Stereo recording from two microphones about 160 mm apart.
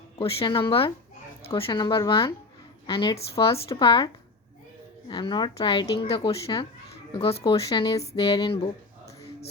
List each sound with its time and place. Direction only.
0.2 s speech: 35° left (ahead or behind)
7.1 s speech: 40° left (ahead or behind)
7.7 s speech: 20° left (ahead or behind)
8.0 s music: 35° left (ahead or behind)